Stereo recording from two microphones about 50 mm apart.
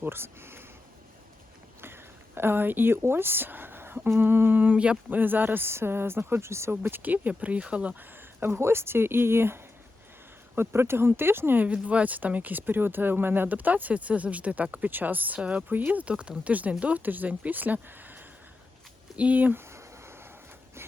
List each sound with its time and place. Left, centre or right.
0.0 s speech: right
1.8 s speech: right
7.0 s speech: right
8.4 s speech: right
11.6 s speech: right
19.5 s a sound: right